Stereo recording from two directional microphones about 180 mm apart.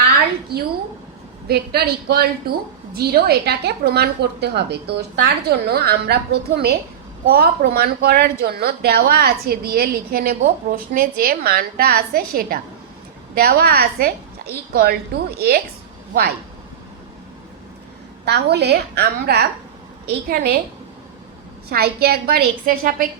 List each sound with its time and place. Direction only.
0.5 s a woman's voice: 60° right (ahead or behind)
18.3 s a woman's voice: 65° right (ahead or behind)
21.7 s a woman's voice: 60° right (ahead or behind)